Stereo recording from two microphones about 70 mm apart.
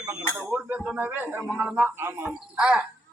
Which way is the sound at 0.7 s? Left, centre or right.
Right.